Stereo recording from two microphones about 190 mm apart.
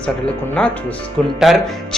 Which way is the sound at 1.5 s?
Centre (ahead or behind).